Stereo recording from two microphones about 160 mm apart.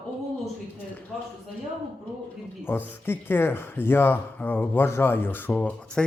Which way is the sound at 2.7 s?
15° left (ahead or behind).